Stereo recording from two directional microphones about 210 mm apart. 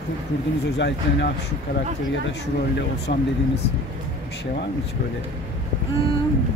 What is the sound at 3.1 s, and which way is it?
Speech, 40° left (ahead or behind).